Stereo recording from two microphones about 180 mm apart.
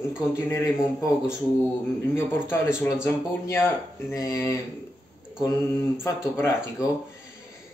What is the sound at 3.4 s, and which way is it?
Speech, 15° left (ahead or behind).